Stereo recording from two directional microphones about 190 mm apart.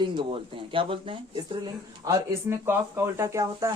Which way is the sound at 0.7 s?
25° right (ahead or behind).